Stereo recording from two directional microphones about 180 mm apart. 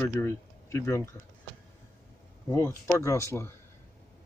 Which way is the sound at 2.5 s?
15° left (ahead or behind).